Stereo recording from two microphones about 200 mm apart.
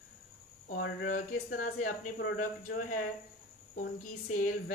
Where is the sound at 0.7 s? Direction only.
40° left (ahead or behind).